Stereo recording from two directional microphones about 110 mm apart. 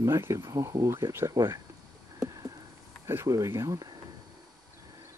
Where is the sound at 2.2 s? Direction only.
35° right (ahead or behind).